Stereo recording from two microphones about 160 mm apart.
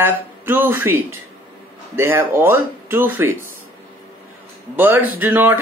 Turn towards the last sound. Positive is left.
turn(degrees=-10)  # may be behind; listen again after turning